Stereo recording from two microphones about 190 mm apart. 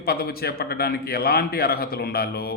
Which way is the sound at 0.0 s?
55° left (ahead or behind).